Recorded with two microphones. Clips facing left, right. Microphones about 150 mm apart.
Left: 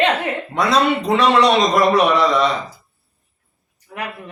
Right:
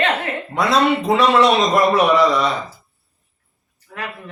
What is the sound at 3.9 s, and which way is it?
Speech, 15° left (ahead or behind).